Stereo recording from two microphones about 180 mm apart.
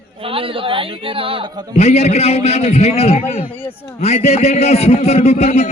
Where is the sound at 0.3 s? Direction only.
30° right (ahead or behind).